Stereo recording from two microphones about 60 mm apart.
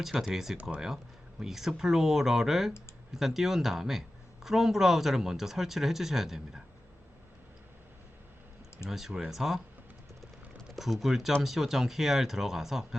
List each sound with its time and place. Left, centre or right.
0.0 s speech: centre
0.5 s speech: right
1.4 s speech: centre
8.9 s speech: centre
10.8 s speech: centre